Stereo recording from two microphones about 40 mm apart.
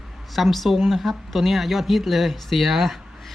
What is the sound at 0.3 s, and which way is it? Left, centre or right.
Speech, centre.